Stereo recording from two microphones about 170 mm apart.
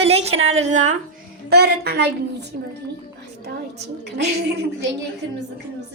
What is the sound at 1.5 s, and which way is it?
Speech, 75° right (ahead or behind).